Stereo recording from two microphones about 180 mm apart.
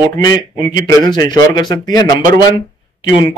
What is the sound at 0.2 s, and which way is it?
A man's voice, 20° left (ahead or behind).